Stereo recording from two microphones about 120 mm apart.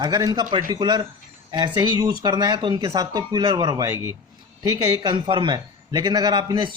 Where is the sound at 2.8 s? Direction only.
30° right (ahead or behind).